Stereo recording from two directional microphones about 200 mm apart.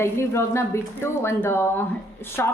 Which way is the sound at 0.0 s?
15° left (ahead or behind).